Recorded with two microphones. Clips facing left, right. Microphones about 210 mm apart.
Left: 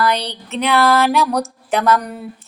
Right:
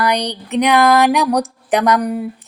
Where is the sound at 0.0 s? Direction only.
15° right (ahead or behind).